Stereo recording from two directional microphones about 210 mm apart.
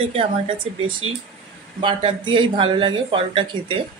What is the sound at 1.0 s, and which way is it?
Speech, 80° right.